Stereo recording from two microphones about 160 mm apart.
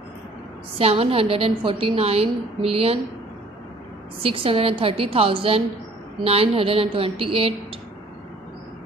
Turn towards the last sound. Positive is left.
turn(degrees=-35)  # may be behind; listen again after turning